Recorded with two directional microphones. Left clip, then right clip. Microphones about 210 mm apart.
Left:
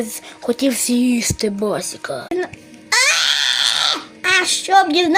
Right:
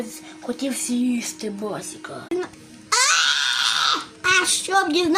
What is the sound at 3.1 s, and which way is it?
Screaming, 10° left (ahead or behind).